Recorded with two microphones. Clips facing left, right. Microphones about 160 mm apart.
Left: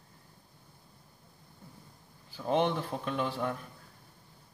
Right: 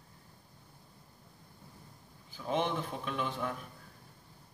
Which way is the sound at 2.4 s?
35° left (ahead or behind).